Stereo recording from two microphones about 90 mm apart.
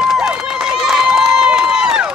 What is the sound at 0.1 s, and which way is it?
Run, 5° right (ahead or behind).